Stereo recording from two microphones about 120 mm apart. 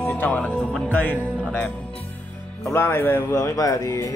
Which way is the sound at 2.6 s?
20° left (ahead or behind).